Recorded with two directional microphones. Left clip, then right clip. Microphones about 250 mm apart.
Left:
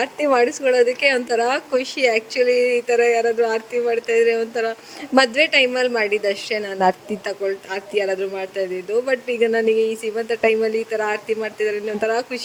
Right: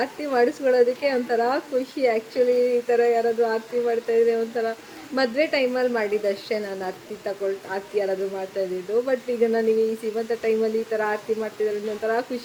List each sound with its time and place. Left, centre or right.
0.0 s speech: left